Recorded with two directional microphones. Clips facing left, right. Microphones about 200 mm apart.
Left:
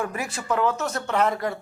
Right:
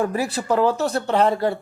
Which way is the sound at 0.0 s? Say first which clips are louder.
Right 7 dB; 35° right (ahead or behind).